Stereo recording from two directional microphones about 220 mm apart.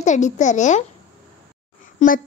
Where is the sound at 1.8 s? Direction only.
35° left (ahead or behind).